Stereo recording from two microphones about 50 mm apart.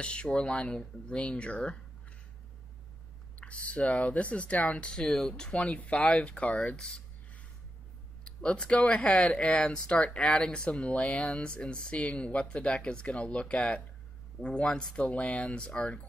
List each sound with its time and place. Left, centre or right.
0.0 s speech: left
3.3 s speech: left
15.0 s speech: left